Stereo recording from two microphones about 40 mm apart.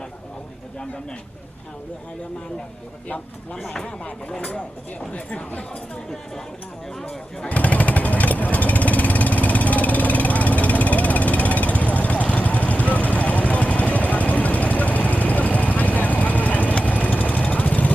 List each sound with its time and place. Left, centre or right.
4.4 s speech: left
7.0 s vehicle: left